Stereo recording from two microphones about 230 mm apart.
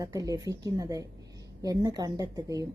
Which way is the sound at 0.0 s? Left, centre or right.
Centre.